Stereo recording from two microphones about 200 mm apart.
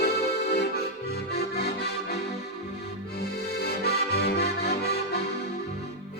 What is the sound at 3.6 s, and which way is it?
Accordion, 55° left (ahead or behind).